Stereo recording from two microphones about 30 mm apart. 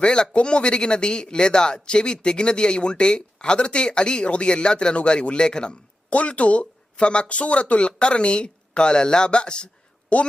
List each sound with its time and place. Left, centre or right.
0.0 s speech: left
6.1 s speech: left
10.1 s speech: left